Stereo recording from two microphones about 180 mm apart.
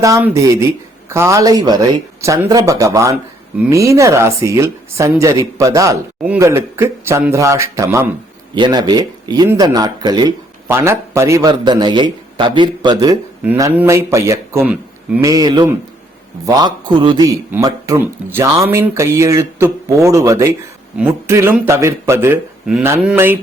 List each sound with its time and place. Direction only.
0.0 s speech: 15° right (ahead or behind)
8.5 s speech: 25° right (ahead or behind)
22.6 s speech: 5° right (ahead or behind)